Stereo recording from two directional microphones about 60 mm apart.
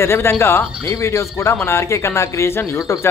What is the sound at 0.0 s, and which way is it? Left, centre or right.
Speech, left.